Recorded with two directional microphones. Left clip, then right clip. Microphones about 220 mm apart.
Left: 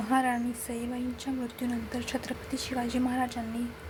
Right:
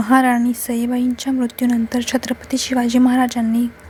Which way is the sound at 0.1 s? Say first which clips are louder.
Right 13 dB; 40° right (ahead or behind).